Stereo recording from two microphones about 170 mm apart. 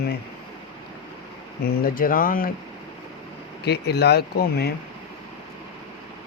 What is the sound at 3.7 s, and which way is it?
Speech, 75° left (ahead or behind).